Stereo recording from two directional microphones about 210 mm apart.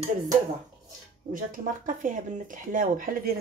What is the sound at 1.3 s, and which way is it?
Speech, 40° right (ahead or behind).